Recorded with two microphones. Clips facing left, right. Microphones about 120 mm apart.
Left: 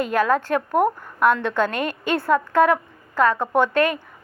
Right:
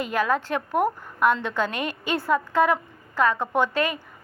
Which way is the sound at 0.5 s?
5° right (ahead or behind).